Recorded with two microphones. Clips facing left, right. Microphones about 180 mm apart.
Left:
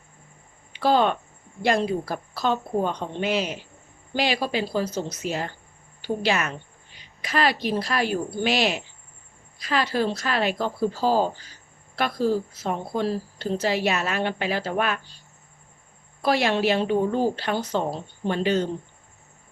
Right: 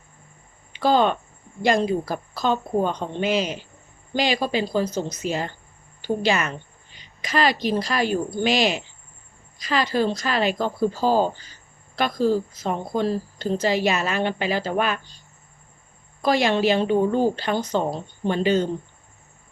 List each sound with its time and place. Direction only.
0.7 s a woman's voice: centre (ahead or behind)
16.2 s speech: 5° left (ahead or behind)